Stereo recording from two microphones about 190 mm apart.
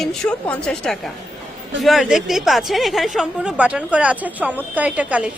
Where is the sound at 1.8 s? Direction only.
Centre (ahead or behind).